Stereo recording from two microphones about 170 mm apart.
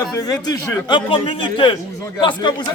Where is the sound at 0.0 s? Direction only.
25° left (ahead or behind).